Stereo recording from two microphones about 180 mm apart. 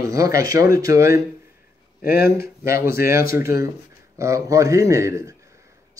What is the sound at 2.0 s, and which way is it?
Speech, 60° left (ahead or behind).